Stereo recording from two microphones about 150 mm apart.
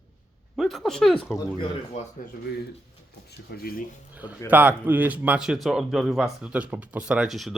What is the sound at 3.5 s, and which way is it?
Speech, 85° left.